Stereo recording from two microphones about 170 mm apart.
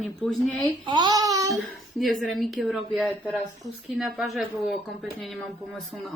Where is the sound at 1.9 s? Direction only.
Centre (ahead or behind).